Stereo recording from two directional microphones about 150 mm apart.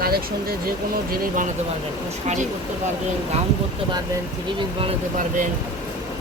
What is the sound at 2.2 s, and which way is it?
Speech, 55° right (ahead or behind).